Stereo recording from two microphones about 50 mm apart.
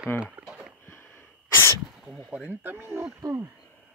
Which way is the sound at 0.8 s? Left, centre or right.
Left.